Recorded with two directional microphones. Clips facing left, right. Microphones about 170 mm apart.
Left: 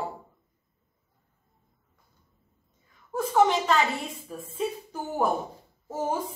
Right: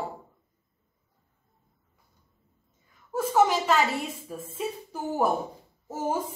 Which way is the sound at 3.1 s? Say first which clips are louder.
Even; 5° right (ahead or behind).